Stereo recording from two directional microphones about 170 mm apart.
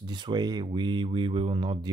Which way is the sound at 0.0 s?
25° right (ahead or behind).